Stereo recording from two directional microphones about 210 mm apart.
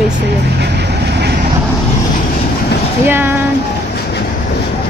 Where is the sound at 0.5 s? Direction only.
55° right (ahead or behind).